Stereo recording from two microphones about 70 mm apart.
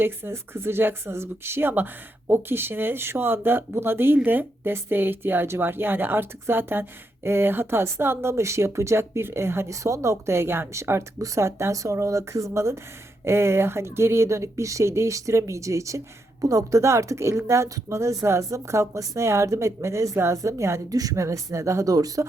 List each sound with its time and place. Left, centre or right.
0.0 s speech: right
20.9 s speech: right